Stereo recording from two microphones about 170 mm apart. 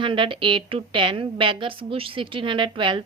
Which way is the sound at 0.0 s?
30° right (ahead or behind).